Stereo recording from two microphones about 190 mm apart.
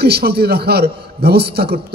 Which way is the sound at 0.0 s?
55° right (ahead or behind).